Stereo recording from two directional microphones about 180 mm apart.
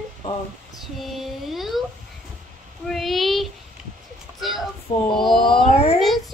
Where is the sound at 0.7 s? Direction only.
Centre (ahead or behind).